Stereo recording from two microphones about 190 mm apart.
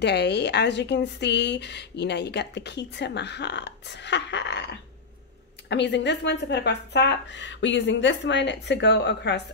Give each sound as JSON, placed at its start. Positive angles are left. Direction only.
{"t": 0.0, "sound": "a woman's voice", "side_deg": 60}
{"t": 5.7, "sound": "speech", "side_deg": 70}